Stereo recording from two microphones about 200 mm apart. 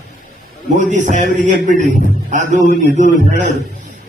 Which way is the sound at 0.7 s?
40° right (ahead or behind).